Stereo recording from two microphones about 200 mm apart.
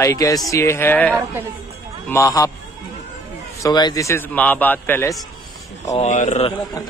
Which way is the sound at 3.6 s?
20° left (ahead or behind).